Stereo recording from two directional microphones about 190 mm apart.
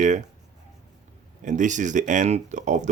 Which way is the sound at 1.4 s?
40° right (ahead or behind).